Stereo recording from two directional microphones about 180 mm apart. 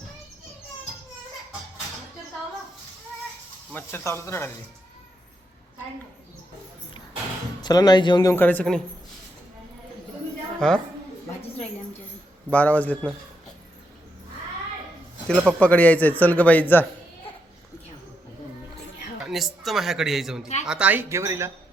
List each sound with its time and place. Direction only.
3.7 s a man's voice: 10° left (ahead or behind)
7.6 s speech: 20° left (ahead or behind)
10.6 s a man's voice: 5° left (ahead or behind)
12.5 s a man's voice: 10° left (ahead or behind)
15.4 s a man's voice: 5° left (ahead or behind)
19.2 s a man's voice: centre (ahead or behind)